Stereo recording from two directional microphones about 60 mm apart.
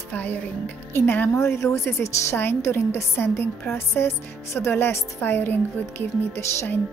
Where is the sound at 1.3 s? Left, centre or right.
Left.